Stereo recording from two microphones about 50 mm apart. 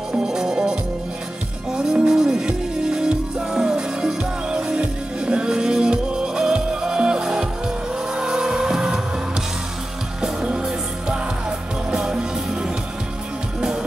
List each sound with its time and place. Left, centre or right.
0.2 s music: centre
1.8 s music: centre
10.4 s music: centre